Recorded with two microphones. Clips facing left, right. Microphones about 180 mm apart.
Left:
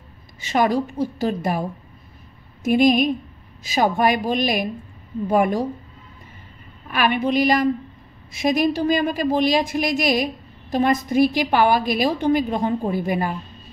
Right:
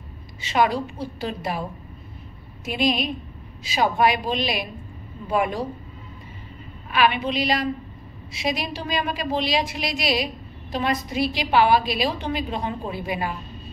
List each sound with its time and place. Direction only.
0.4 s a woman's voice: 45° left (ahead or behind)
6.9 s a woman's voice: 45° left (ahead or behind)